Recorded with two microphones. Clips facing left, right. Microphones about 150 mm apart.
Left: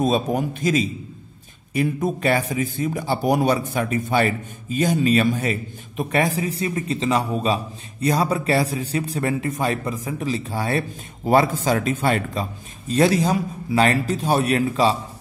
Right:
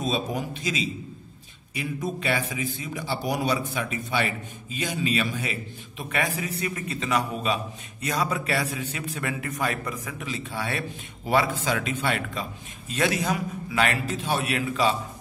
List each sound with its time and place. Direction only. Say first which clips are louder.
0.0 s a man's voice: left 7 dB; 50° left (ahead or behind); by 15.0 s 35° left (ahead or behind)